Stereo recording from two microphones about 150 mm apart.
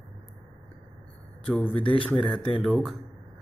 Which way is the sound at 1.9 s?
10° left (ahead or behind).